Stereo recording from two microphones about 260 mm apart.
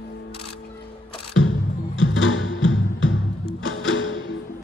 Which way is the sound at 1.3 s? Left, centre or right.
Left.